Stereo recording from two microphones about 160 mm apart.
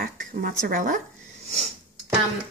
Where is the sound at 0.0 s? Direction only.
65° right (ahead or behind).